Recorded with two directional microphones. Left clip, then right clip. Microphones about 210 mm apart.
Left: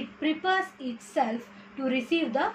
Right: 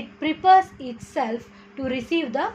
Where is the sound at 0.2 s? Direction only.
50° right (ahead or behind).